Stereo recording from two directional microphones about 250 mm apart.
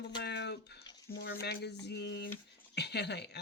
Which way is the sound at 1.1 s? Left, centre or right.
Left.